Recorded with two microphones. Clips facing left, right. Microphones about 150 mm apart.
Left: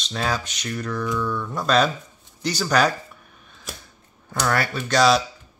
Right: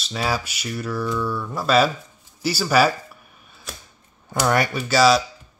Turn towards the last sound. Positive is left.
turn(degrees=-5)  # may be behind; listen again after turning